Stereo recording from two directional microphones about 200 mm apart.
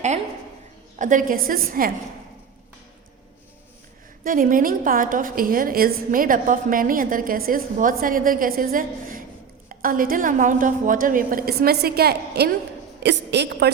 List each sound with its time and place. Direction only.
0.9 s a woman's voice: 40° right (ahead or behind)
4.2 s a woman's voice: 40° right (ahead or behind)